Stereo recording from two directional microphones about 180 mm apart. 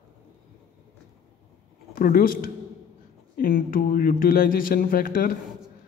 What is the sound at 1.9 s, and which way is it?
Speech, 50° left (ahead or behind).